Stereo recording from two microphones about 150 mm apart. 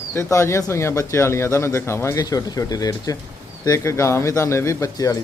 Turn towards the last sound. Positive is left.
turn(degrees=20)  # may be behind; listen again after turning